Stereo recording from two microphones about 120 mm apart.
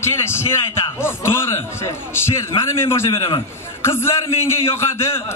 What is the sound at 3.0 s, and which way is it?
Speech, 45° left (ahead or behind).